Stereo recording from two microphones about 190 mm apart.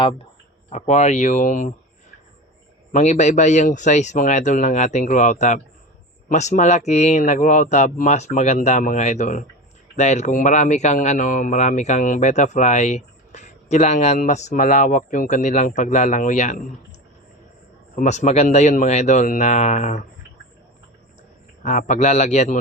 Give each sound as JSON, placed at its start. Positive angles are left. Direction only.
{"t": 0.7, "sound": "speech", "side_deg": 40}
{"t": 2.9, "sound": "speech", "side_deg": 35}
{"t": 17.9, "sound": "speech", "side_deg": 40}
{"t": 21.6, "sound": "speech", "side_deg": 40}